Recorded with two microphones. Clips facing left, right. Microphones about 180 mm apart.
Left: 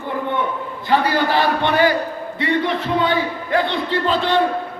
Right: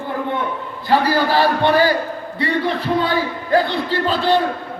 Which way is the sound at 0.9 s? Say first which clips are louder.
Right 1 dB; 35° right (ahead or behind).